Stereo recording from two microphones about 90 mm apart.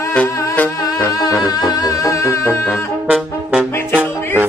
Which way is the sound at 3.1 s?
5° right (ahead or behind).